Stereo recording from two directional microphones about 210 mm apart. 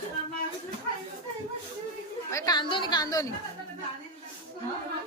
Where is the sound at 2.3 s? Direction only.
20° left (ahead or behind).